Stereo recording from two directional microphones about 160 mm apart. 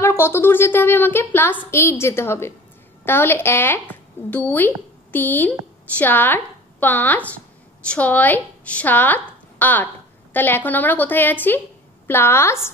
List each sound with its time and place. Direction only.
0.0 s a woman's voice: 15° left (ahead or behind)